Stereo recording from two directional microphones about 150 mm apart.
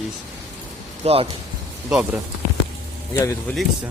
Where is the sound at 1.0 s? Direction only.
40° right (ahead or behind).